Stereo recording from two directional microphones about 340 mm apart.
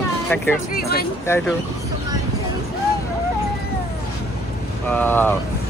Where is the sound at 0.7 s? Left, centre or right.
Left.